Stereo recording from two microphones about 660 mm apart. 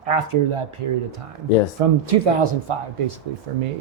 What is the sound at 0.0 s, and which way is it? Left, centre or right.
Speech, right.